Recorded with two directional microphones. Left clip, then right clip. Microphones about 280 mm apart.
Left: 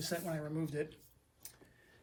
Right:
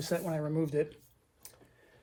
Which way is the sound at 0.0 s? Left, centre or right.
Right.